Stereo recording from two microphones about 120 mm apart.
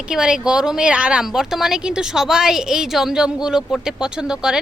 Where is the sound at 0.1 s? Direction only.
5° right (ahead or behind).